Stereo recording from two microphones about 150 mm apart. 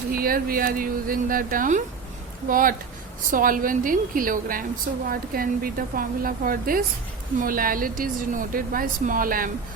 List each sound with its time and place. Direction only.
0.1 s a woman's voice: 75° right (ahead or behind)